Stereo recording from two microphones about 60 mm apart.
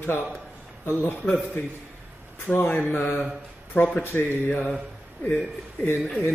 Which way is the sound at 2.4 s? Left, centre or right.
Left.